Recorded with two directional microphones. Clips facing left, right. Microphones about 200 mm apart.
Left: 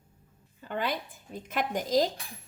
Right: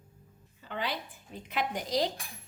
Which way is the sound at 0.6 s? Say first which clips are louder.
Left 4 dB; 50° left (ahead or behind).